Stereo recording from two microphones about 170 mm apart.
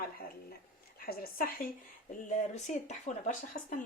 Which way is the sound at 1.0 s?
65° left (ahead or behind).